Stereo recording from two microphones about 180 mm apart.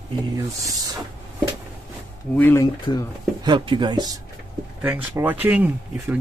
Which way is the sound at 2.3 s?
10° left (ahead or behind).